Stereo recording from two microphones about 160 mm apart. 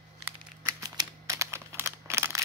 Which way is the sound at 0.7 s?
25° right (ahead or behind).